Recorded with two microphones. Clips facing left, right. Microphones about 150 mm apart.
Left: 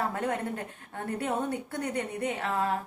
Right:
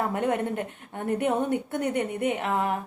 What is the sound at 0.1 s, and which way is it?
A woman's voice, 25° right (ahead or behind).